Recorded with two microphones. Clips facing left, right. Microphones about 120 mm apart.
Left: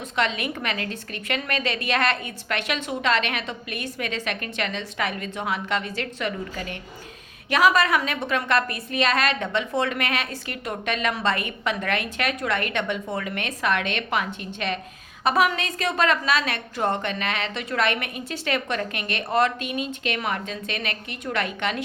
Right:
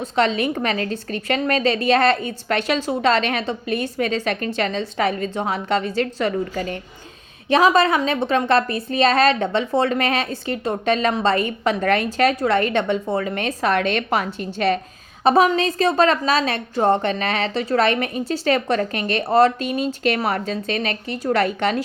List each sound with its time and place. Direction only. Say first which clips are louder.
0.0 s a woman's voice: right 6 dB; 30° right (ahead or behind)